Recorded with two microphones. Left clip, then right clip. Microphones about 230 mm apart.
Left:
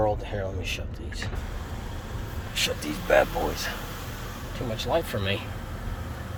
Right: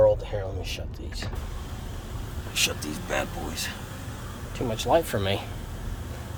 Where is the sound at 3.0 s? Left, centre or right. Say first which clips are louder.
Left 9 dB; centre.